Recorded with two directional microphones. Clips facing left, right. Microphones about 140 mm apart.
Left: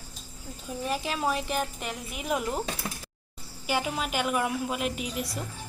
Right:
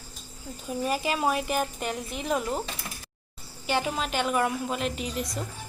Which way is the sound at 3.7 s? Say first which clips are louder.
Right 1 dB; 5° left (ahead or behind).